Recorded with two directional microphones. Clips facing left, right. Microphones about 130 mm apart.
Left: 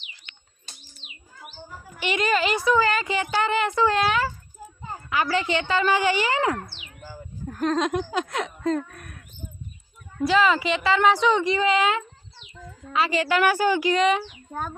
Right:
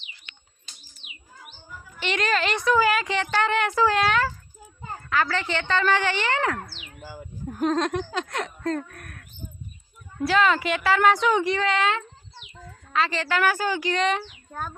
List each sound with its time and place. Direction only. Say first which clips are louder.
2.0 s speech: left 2 dB; 5° left (ahead or behind)
7.4 s speech: right 1 dB; 10° right (ahead or behind)
7.9 s speech: left 2 dB; 10° left (ahead or behind)
10.2 s speech: left 1 dB; centre (ahead or behind)